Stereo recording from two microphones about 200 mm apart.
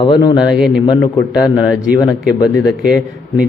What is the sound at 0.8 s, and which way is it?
Speech, 20° left (ahead or behind).